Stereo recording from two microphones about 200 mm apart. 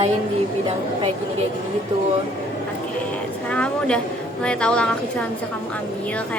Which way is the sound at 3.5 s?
5° left (ahead or behind).